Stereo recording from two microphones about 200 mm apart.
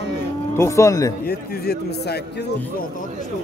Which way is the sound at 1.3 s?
55° left (ahead or behind).